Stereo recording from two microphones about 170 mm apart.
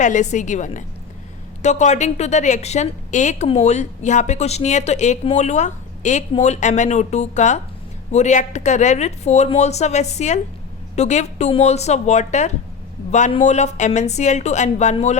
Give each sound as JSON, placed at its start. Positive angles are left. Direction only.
{"t": 0.0, "sound": "a woman's voice", "side_deg": 45}